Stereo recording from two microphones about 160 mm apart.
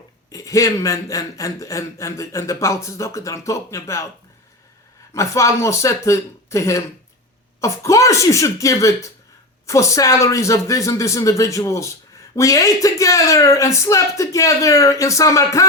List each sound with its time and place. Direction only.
0.3 s a man's voice: 20° left (ahead or behind)
5.1 s a man's voice: 20° left (ahead or behind)